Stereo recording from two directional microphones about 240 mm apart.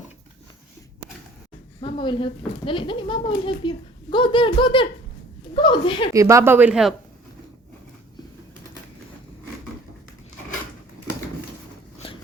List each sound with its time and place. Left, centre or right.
1.8 s a child's voice: left
6.1 s speech: centre